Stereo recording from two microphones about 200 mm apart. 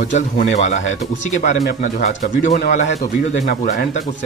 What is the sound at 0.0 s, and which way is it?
Speech, 40° left (ahead or behind).